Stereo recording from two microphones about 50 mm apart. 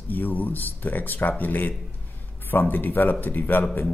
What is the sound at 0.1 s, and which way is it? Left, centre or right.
Speech, left.